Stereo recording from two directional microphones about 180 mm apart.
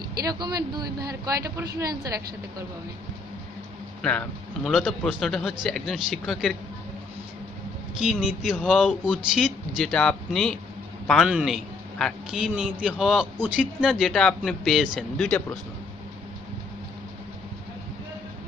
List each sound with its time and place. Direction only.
0.3 s speech: 20° right (ahead or behind)
4.0 s a man's voice: 5° left (ahead or behind)
8.0 s a man's voice: centre (ahead or behind)